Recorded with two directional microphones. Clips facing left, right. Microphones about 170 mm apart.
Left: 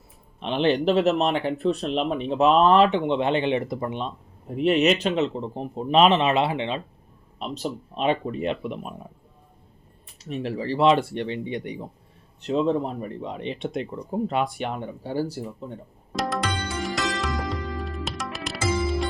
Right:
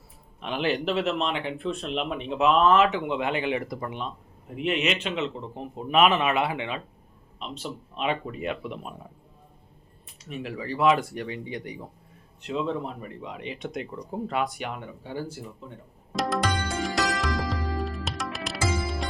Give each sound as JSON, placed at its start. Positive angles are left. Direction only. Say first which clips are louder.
{"t": 0.3, "sound": "speech", "louder": "left 5 dB", "side_deg": 25}
{"t": 4.4, "sound": "speech", "louder": "left 7 dB", "side_deg": 40}
{"t": 7.3, "sound": "speech", "louder": "left 6 dB", "side_deg": 40}
{"t": 10.2, "sound": "speech", "louder": "left 5 dB", "side_deg": 35}
{"t": 12.4, "sound": "speech", "louder": "left 6 dB", "side_deg": 35}
{"t": 16.1, "sound": "tabla", "louder": "even", "side_deg": 0}
{"t": 16.8, "sound": "music", "louder": "even", "side_deg": 0}